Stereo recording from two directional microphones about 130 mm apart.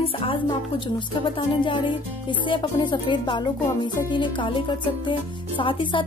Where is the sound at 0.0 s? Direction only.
45° left (ahead or behind).